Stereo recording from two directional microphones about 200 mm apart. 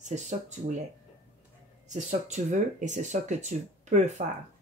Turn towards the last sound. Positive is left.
turn(degrees=-35)  # may be behind; listen again after turning